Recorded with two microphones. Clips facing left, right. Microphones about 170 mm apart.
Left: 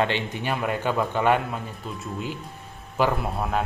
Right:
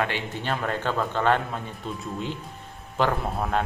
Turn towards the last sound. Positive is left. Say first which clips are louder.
# even
turn(degrees=5)  # may be behind; listen again after turning